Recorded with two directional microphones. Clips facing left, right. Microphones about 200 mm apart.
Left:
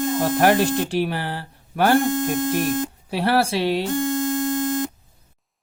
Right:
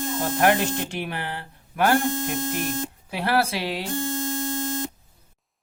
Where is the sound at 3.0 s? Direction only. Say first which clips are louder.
Left 3 dB; 30° left (ahead or behind).